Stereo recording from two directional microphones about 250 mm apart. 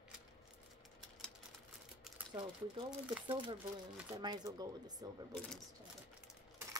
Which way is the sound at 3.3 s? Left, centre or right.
Centre.